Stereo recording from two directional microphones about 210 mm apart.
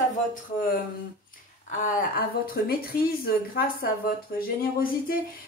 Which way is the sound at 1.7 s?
40° left (ahead or behind).